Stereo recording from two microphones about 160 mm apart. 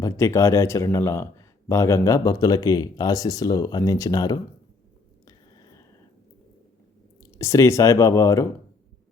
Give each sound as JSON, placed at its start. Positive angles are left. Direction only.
{"t": 0.0, "sound": "speech", "side_deg": 20}
{"t": 5.2, "sound": "whispering", "side_deg": 25}
{"t": 7.2, "sound": "speech", "side_deg": 20}